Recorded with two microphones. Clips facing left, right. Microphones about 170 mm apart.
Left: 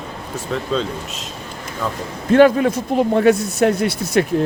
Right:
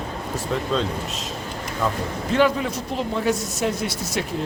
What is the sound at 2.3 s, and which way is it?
A man's voice, 55° left (ahead or behind).